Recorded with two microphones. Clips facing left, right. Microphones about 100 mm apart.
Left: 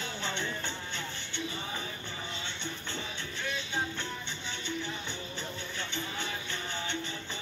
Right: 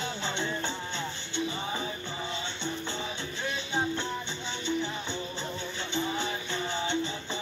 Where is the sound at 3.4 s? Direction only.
20° right (ahead or behind).